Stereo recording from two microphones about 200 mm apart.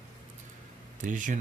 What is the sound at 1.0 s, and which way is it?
Speech, 40° right (ahead or behind).